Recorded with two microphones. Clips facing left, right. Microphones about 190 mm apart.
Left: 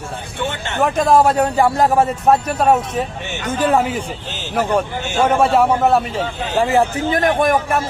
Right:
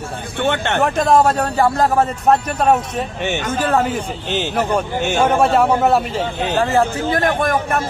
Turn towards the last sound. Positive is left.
turn(degrees=10)  # may be behind; listen again after turning